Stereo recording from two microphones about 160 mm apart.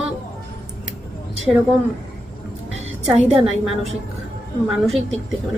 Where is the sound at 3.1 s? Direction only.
5° right (ahead or behind).